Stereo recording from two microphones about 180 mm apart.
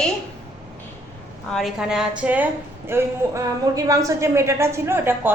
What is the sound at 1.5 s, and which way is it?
A woman's voice, centre (ahead or behind).